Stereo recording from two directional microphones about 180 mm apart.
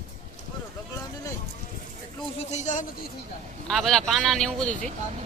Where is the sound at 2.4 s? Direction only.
40° left (ahead or behind).